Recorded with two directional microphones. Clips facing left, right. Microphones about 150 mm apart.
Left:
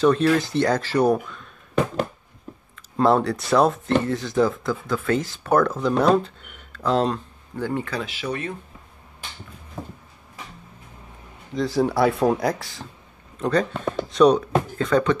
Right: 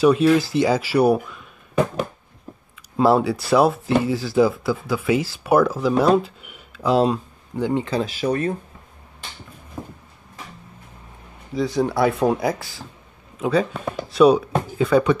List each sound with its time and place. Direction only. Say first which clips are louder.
0.0 s speech: right 3 dB; 10° right (ahead or behind)
3.0 s speech: right 2 dB; 5° right (ahead or behind); by 8.0 s 20° right (ahead or behind)
8.0 s speech: right 7 dB; 40° right (ahead or behind)
11.5 s speech: even; centre (ahead or behind)